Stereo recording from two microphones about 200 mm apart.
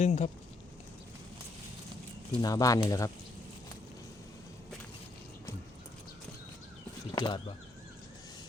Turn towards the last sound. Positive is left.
turn(degrees=25)  # may be behind; listen again after turning